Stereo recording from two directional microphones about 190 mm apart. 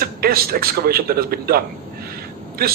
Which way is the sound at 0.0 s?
50° right (ahead or behind).